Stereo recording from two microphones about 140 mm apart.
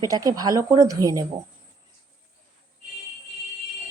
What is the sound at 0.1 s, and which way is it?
A woman's voice, 25° right (ahead or behind).